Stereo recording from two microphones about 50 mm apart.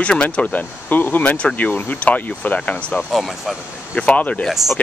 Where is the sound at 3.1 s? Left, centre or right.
Centre.